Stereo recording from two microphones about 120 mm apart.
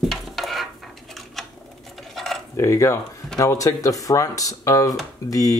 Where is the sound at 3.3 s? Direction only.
30° left (ahead or behind).